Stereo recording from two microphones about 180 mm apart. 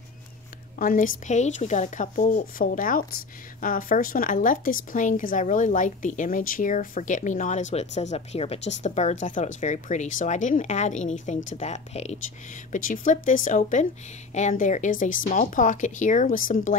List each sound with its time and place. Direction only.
0.7 s a woman's voice: 50° left (ahead or behind)
12.7 s a woman's voice: 45° left (ahead or behind)